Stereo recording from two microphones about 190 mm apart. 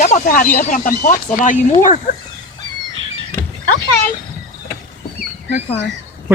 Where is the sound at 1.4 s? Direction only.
45° left (ahead or behind).